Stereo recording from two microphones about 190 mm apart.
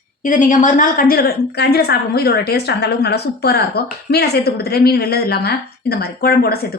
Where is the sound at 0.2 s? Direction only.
45° left (ahead or behind).